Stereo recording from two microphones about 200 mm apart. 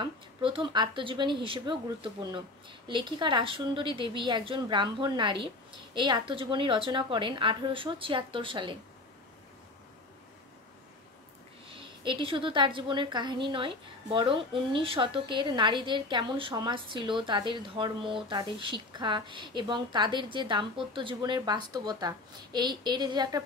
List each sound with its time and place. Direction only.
0.0 s a woman's voice: 25° right (ahead or behind)
11.7 s a woman's voice: 25° right (ahead or behind)